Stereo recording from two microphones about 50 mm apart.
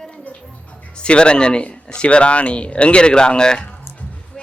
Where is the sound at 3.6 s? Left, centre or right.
Left.